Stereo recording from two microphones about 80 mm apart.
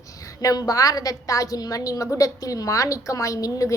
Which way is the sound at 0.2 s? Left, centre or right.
Left.